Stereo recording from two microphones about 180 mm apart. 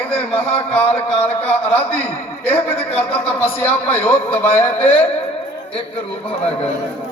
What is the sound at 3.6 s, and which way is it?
Music, 10° left (ahead or behind).